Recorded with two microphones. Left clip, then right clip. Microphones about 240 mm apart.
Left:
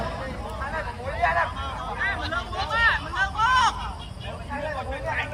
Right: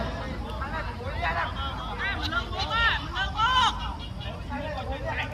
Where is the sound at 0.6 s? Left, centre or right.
Left.